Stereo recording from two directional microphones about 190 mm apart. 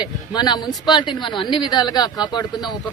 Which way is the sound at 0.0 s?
20° left (ahead or behind).